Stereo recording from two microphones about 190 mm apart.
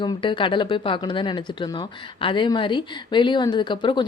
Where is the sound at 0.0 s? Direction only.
25° left (ahead or behind).